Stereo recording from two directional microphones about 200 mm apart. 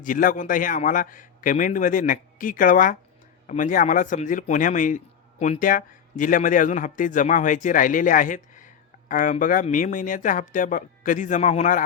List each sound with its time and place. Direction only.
0.0 s a man's voice: 45° left (ahead or behind)